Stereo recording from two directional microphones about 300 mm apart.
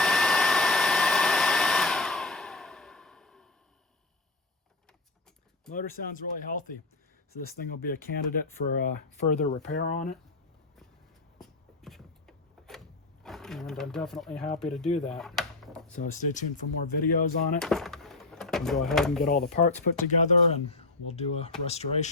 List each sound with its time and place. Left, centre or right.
0.0 s hair dryer: centre
5.7 s speech: left
11.3 s a sound: centre
14.6 s speech: centre
15.0 s a sound: centre
15.9 s speech: left
17.6 s drawer open or close: centre
20.2 s speech: centre